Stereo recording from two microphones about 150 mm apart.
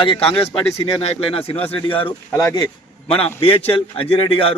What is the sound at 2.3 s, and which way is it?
Speech, 20° left (ahead or behind).